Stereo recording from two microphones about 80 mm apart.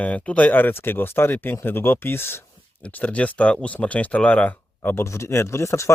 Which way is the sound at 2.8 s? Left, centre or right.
Centre.